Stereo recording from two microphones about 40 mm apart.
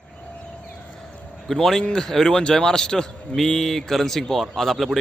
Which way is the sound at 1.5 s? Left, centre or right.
Centre.